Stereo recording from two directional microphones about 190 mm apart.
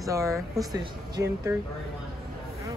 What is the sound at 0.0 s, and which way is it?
Speech, 15° right (ahead or behind).